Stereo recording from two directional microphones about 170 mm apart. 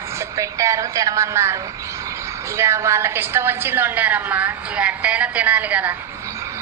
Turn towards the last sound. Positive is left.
turn(degrees=-10)  # may be behind; listen again after turning